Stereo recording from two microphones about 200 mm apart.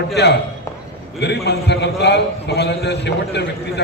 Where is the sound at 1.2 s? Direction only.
55° left (ahead or behind).